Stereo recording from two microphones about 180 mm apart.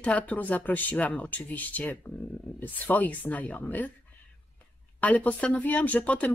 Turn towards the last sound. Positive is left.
turn(degrees=10)  # may be behind; listen again after turning